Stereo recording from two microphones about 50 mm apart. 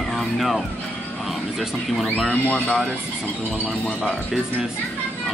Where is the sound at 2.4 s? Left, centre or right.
Left.